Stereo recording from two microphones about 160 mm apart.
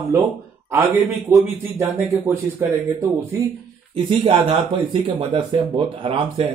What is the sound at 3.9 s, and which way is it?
Speech, 30° right (ahead or behind).